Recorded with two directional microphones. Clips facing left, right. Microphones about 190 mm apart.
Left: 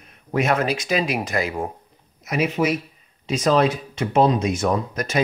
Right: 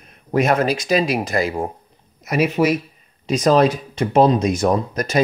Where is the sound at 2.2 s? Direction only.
60° right (ahead or behind).